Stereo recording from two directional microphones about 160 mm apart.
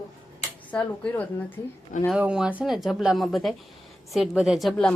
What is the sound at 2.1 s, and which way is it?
Speech, 5° right (ahead or behind).